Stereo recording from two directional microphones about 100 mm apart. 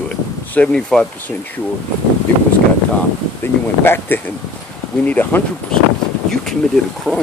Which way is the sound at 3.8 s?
20° left (ahead or behind).